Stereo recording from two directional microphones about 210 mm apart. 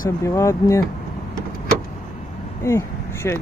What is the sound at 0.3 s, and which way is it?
Speech, 15° left (ahead or behind).